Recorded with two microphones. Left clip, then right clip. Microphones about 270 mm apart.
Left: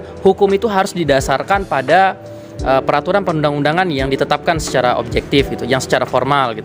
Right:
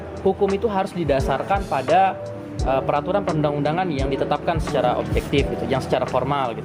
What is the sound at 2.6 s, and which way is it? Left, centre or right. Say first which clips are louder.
A man's voice: left 7 dB; left.